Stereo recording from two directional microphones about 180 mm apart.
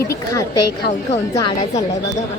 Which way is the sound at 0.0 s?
15° left (ahead or behind).